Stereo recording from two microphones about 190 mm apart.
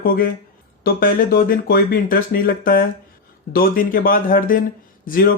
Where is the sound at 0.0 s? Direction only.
50° left (ahead or behind).